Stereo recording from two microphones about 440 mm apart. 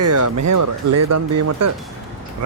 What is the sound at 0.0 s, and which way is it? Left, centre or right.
Speech, right.